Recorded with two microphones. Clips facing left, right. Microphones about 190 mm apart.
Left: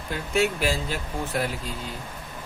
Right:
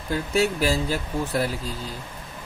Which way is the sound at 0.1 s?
35° right (ahead or behind).